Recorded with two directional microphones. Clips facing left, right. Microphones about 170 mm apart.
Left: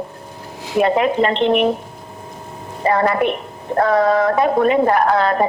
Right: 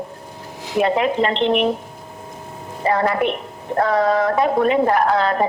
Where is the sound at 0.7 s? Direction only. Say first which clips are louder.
Left 2 dB; 50° left (ahead or behind).